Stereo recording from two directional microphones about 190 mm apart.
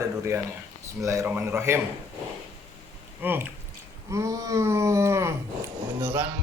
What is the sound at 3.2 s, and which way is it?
A man's voice, 10° right (ahead or behind).